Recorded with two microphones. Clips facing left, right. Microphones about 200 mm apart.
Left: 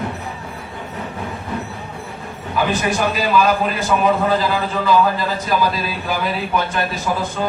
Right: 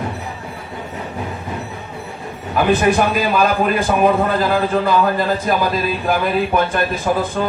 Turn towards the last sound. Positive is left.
turn(degrees=-50)  # may be behind; listen again after turning